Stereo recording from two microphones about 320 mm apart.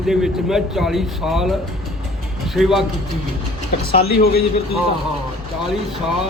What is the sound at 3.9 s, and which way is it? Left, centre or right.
Speech, left.